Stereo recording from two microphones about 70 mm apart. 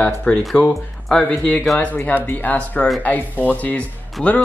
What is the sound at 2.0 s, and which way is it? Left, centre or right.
Speech, left.